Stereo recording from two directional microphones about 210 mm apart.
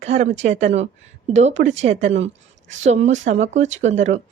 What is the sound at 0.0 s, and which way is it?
A woman's voice, 30° right (ahead or behind).